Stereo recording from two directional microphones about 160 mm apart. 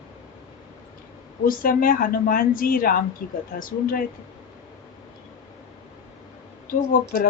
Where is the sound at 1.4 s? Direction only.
60° left (ahead or behind).